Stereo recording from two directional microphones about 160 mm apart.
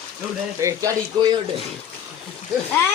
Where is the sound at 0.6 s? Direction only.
20° right (ahead or behind).